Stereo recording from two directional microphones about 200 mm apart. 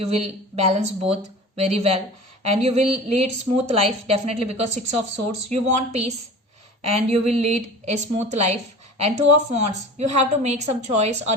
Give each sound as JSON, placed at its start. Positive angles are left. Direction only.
{"t": 0.1, "sound": "a woman's voice", "side_deg": -30}